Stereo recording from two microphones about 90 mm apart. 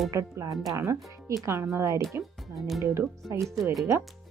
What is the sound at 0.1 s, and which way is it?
Speech, 35° right (ahead or behind).